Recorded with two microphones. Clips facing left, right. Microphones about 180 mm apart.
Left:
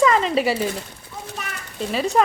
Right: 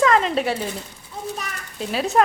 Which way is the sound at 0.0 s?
Centre (ahead or behind).